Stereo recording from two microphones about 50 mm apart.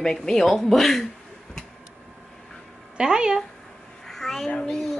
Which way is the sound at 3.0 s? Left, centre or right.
Centre.